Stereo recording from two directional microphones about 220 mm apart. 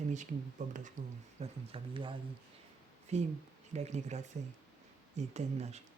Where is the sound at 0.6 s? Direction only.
35° right (ahead or behind).